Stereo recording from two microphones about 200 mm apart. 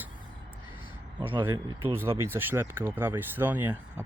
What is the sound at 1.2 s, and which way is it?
Speech, 25° right (ahead or behind).